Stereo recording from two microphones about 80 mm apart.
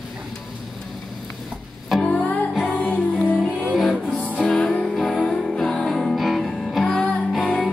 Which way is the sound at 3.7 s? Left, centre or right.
Centre.